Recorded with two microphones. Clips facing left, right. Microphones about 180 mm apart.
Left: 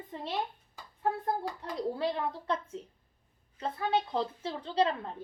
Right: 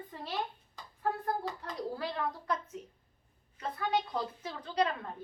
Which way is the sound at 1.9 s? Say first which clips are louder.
Left 4 dB; 25° left (ahead or behind).